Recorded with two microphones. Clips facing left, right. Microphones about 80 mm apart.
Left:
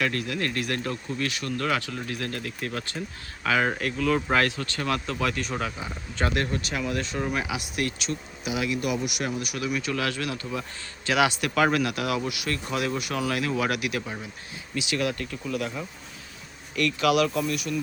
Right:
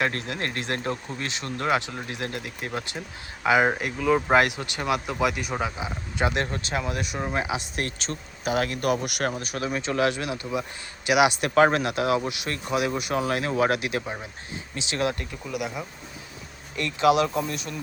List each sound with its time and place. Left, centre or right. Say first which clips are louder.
0.0 s speech: even; right
6.4 s speech: even; right
15.4 s speech: even; centre